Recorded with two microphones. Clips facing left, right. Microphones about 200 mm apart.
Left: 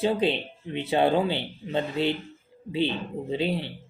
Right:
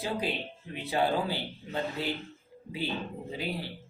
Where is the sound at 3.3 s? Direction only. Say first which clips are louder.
Left 8 dB; 25° left (ahead or behind).